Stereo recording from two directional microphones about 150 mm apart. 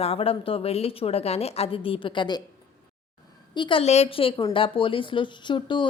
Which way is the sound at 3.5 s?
35° left (ahead or behind).